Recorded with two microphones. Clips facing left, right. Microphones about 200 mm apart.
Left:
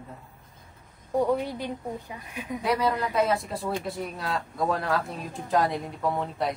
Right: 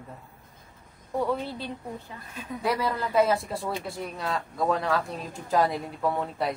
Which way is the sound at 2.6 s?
Centre (ahead or behind).